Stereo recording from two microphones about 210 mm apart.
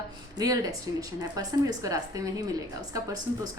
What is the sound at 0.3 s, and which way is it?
A woman's voice, 15° right (ahead or behind).